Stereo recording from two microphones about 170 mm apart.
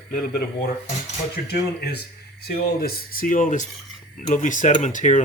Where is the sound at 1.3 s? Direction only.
70° left (ahead or behind).